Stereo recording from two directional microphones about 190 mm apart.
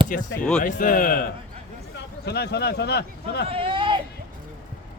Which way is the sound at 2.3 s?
60° left (ahead or behind).